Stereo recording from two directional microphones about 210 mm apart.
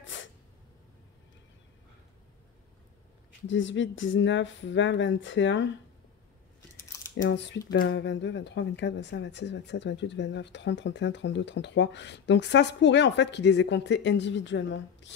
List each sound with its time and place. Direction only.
0.0 s a sound: 60° left (ahead or behind)
3.4 s a woman's voice: 60° left (ahead or behind)
7.2 s a woman's voice: 60° left (ahead or behind)